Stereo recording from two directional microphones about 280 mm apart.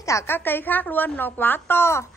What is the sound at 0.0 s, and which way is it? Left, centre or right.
A woman's voice, centre.